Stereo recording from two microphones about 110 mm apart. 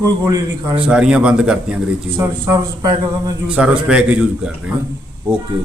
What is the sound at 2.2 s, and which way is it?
Speech, 30° right (ahead or behind).